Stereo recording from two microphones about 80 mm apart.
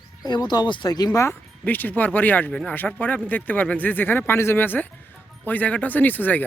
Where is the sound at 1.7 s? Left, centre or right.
Left.